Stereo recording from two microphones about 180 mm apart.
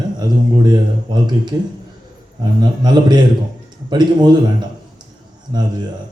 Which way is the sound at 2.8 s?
25° right (ahead or behind).